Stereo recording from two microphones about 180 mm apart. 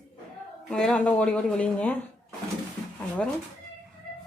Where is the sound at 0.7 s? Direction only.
5° left (ahead or behind).